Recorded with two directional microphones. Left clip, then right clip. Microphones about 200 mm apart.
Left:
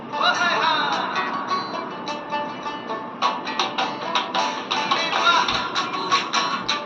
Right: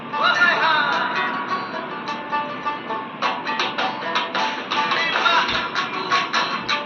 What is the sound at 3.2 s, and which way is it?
Music, 40° left (ahead or behind).